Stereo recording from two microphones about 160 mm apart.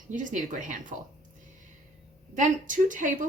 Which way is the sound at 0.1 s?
55° right (ahead or behind).